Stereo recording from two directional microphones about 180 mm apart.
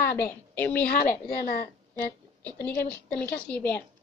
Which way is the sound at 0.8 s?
60° left (ahead or behind).